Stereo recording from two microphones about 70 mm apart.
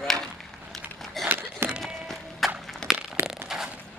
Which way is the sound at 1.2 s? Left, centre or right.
Right.